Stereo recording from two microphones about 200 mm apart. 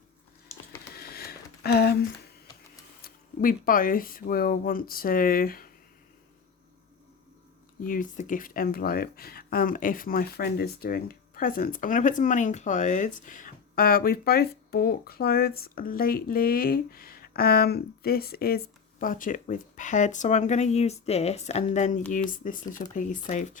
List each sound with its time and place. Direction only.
0.9 s a sound: 50° left (ahead or behind)
3.0 s speech: 45° left (ahead or behind)
7.8 s speech: 40° left (ahead or behind)